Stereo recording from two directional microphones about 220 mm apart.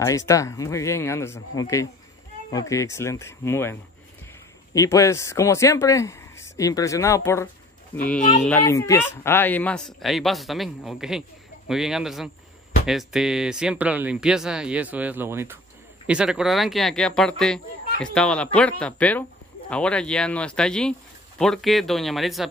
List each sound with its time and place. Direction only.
0.3 s speech: 15° left (ahead or behind)
4.7 s speech: 15° left (ahead or behind)
8.2 s speech: 35° left (ahead or behind)
8.5 s speech: 10° left (ahead or behind)